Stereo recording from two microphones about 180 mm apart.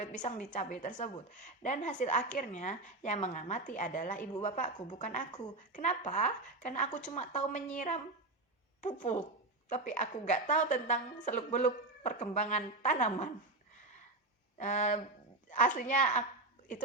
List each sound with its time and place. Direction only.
0.0 s a woman's voice: 40° left (ahead or behind)
14.6 s a woman's voice: 40° left (ahead or behind)